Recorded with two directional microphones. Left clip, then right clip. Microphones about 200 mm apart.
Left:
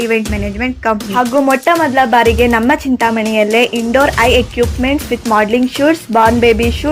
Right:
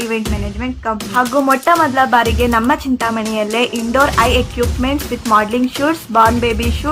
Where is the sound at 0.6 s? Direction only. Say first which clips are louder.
Left 6 dB; 25° left (ahead or behind).